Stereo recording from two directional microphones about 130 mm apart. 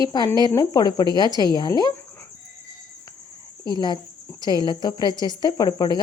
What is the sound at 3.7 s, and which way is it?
A woman's voice, 35° left (ahead or behind).